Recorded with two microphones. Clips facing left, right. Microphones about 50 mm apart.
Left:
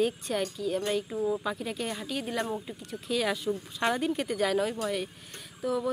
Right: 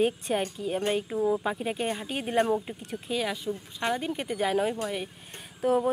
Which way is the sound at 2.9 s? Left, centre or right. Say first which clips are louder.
Left 1 dB; centre.